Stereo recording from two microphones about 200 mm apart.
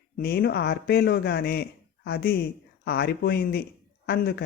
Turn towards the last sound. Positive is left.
turn(degrees=50)  # may be behind; listen again after turning